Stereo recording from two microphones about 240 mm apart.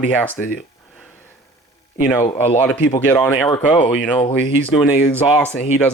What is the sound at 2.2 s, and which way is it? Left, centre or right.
Speech, left.